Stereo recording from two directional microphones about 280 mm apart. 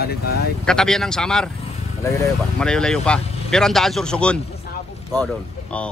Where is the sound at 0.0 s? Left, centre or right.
Left.